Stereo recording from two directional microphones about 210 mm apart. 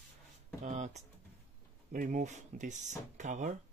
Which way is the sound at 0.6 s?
35° right (ahead or behind).